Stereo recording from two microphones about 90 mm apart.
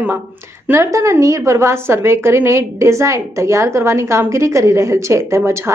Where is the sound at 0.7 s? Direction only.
35° right (ahead or behind).